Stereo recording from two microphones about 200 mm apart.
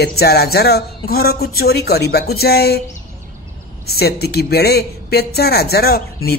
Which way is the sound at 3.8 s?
50° left (ahead or behind).